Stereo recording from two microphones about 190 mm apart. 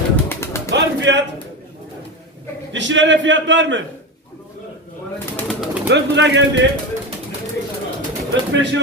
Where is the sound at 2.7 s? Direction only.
75° right (ahead or behind).